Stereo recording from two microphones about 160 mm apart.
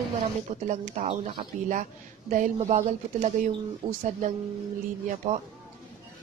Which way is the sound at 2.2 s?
55° right (ahead or behind).